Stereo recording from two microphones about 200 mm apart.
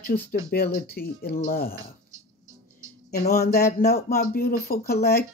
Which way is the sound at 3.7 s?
50° left (ahead or behind).